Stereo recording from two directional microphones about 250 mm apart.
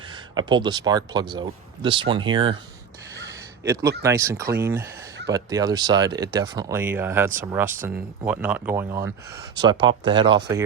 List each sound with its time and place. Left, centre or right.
0.1 s speech: centre
3.7 s speech: centre